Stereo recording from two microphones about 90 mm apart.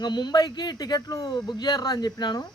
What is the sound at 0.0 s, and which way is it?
Speech, 55° left (ahead or behind).